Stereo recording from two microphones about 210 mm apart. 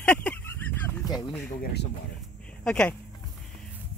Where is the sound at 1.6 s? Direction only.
50° left (ahead or behind).